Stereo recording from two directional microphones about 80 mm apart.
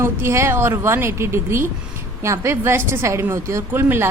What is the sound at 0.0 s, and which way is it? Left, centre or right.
A woman's voice, right.